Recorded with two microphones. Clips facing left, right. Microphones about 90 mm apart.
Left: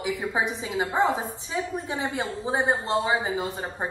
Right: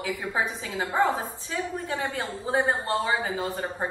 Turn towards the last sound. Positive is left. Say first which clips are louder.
# left 1 dB
turn(degrees=20)  # may be behind; listen again after turning